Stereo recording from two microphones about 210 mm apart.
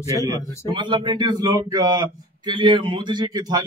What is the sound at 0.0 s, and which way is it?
A man's voice, 15° right (ahead or behind).